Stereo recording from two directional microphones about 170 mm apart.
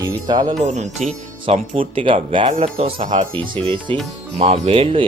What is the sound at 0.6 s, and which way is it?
Speech, 45° right (ahead or behind).